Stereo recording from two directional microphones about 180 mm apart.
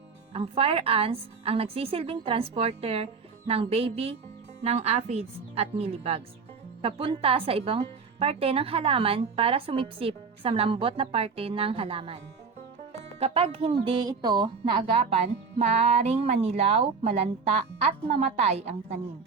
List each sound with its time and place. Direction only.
0.3 s speech: 30° right (ahead or behind)